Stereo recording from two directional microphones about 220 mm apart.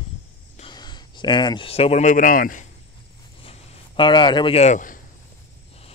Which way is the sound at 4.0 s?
20° left (ahead or behind).